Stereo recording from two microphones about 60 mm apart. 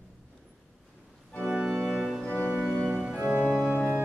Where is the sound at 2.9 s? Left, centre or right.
Centre.